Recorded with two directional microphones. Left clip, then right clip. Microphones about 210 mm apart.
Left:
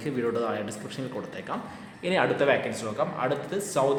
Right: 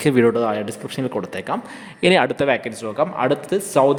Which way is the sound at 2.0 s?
50° right (ahead or behind).